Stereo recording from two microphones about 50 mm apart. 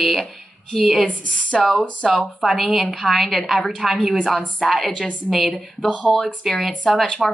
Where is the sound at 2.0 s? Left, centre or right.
Centre.